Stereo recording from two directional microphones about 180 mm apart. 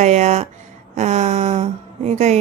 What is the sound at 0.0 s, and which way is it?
A woman's voice, 40° right (ahead or behind).